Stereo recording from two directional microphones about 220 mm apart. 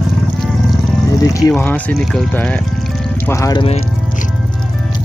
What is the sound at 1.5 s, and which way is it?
Speech, 10° left (ahead or behind).